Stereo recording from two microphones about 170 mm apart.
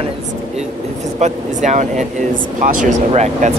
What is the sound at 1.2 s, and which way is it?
Speech, 45° right (ahead or behind).